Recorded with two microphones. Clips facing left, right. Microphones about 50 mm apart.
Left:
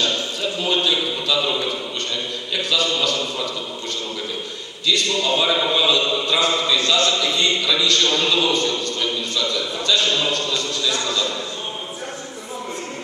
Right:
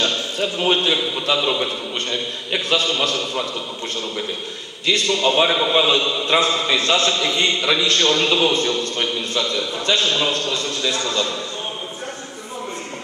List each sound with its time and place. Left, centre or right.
0.0 s a man's voice: right
4.8 s a man's voice: right